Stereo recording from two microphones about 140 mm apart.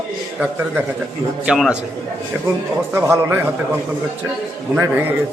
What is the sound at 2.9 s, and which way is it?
Speech, 20° right (ahead or behind).